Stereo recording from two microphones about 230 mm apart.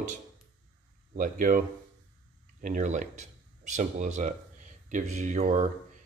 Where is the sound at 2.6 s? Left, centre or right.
Right.